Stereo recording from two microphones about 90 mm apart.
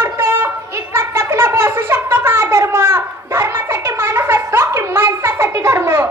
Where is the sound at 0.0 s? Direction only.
25° right (ahead or behind).